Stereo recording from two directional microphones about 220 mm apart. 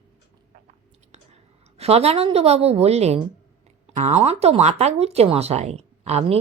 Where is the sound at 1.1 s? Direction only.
30° right (ahead or behind).